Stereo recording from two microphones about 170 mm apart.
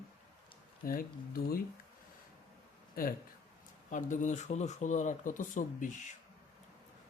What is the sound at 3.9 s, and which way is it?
Speech, 50° left (ahead or behind).